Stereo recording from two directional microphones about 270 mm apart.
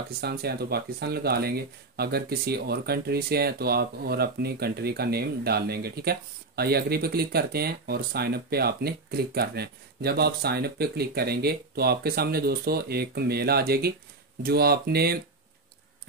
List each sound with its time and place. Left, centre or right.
0.2 s speech: right